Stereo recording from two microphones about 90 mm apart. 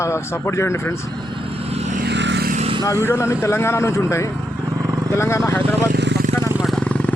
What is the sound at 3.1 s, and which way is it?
Speech, 30° left (ahead or behind).